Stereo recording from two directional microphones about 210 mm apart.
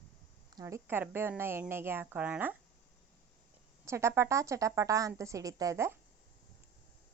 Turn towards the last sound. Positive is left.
turn(degrees=-10)  # may be behind; listen again after turning